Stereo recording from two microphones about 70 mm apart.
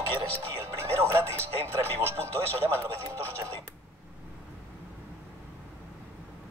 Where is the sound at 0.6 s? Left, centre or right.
Right.